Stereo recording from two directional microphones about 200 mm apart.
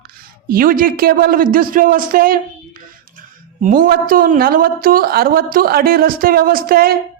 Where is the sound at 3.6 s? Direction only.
45° right (ahead or behind).